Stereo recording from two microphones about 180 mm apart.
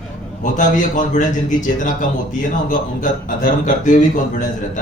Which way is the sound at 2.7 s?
50° left (ahead or behind).